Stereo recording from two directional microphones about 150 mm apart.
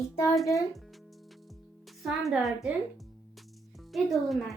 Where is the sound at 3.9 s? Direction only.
Centre (ahead or behind).